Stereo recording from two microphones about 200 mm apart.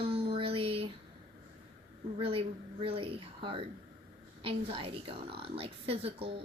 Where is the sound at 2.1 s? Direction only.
25° right (ahead or behind).